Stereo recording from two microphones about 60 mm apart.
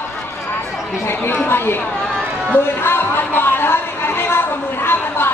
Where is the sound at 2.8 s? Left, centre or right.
Left.